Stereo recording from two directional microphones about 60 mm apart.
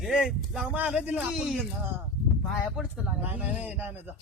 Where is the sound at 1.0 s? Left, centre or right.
Right.